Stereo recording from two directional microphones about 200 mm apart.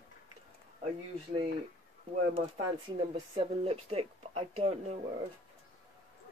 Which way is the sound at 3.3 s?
30° right (ahead or behind).